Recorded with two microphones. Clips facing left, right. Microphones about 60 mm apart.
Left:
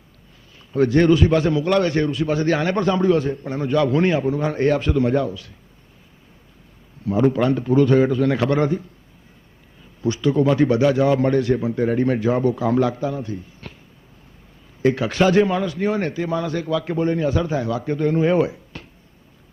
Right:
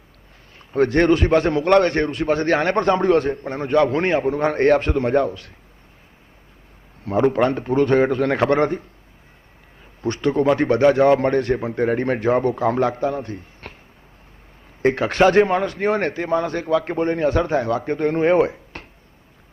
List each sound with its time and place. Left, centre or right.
0.7 s a man's voice: right
3.4 s a man's voice: right
7.2 s a man's voice: right
10.0 s a man's voice: right
14.8 s a man's voice: right